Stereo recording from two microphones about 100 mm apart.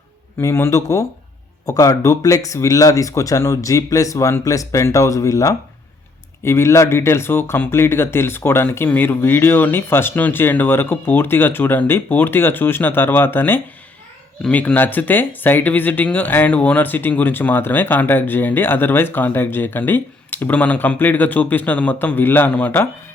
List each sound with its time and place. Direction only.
0.3 s speech: 25° left (ahead or behind)